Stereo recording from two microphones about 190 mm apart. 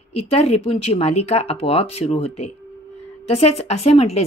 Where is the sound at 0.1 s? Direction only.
35° left (ahead or behind).